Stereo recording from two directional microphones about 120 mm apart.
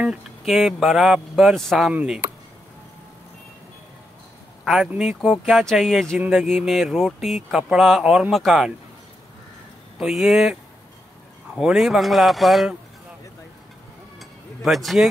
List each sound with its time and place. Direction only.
0.0 s speech: 5° right (ahead or behind)
4.6 s speech: centre (ahead or behind)
9.9 s speech: centre (ahead or behind)
14.6 s speech: centre (ahead or behind)